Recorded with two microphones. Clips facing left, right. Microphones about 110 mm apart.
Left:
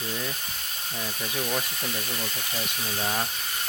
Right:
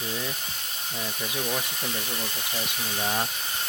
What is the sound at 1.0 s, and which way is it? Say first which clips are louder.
Speech: even; 15° right (ahead or behind).